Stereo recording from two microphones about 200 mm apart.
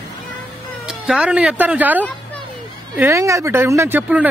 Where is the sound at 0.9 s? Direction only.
5° right (ahead or behind).